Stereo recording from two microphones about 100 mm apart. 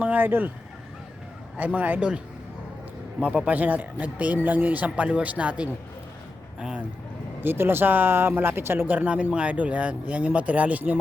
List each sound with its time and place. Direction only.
0.0 s speech: 20° right (ahead or behind)
1.5 s speech: 15° right (ahead or behind)
7.4 s speech: 20° right (ahead or behind)